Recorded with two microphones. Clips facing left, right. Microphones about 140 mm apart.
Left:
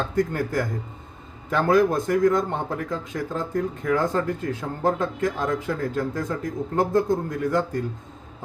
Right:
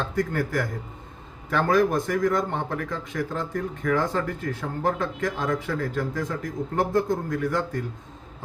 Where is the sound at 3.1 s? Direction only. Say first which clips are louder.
Left 2 dB; 10° left (ahead or behind).